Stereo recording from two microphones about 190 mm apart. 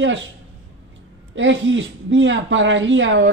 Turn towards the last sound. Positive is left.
turn(degrees=-75)  # may be behind; listen again after turning